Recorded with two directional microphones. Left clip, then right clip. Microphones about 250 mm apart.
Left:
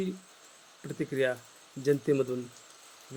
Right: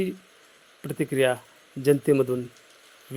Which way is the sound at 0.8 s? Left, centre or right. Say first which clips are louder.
Right 6 dB; right.